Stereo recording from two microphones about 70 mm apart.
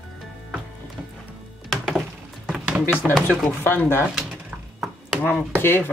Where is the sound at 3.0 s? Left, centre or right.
Centre.